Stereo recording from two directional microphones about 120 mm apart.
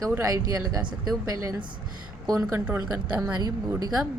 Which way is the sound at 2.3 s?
30° right (ahead or behind).